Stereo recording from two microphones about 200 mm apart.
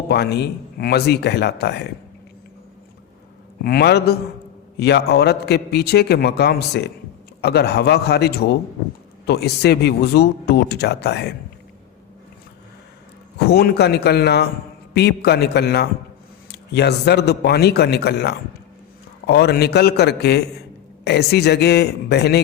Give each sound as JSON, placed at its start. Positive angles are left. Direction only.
{"t": 0.1, "sound": "a man's voice", "side_deg": 55}
{"t": 3.6, "sound": "a man's voice", "side_deg": 50}
{"t": 13.5, "sound": "a man's voice", "side_deg": 55}